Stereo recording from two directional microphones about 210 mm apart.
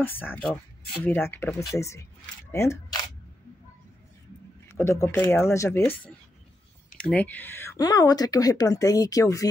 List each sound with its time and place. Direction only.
0.0 s speech: 10° left (ahead or behind)
4.6 s speech: 10° left (ahead or behind)